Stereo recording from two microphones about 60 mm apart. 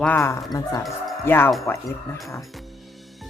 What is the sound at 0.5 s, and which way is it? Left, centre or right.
Speech, left.